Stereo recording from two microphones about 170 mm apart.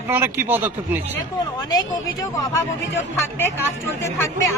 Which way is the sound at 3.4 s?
15° left (ahead or behind).